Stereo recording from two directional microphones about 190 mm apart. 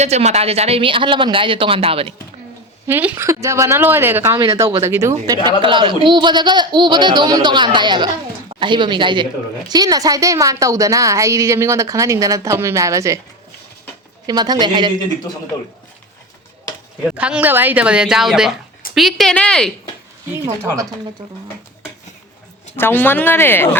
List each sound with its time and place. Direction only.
0.0 s speech: 35° right (ahead or behind)
2.8 s a woman's voice: 10° right (ahead or behind)
5.6 s a woman's voice: 25° right (ahead or behind)
14.3 s speech: 20° right (ahead or behind)
17.2 s a woman's voice: 5° right (ahead or behind)
22.7 s speech: 10° left (ahead or behind)